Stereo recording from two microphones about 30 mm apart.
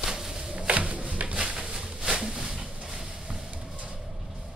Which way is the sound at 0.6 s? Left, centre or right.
Right.